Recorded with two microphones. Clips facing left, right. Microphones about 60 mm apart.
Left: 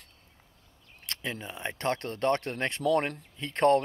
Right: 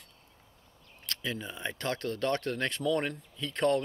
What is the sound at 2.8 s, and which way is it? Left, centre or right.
Speech, left.